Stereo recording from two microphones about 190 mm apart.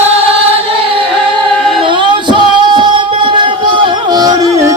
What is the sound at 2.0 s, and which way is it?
Music, 25° right (ahead or behind).